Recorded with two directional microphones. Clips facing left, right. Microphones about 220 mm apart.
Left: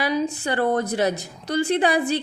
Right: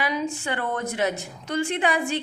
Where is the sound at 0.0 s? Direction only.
35° left (ahead or behind).